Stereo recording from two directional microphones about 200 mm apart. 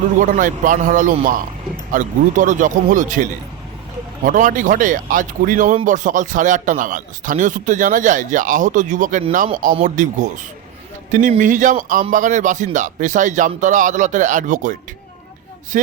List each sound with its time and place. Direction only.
0.3 s speech: 40° right (ahead or behind)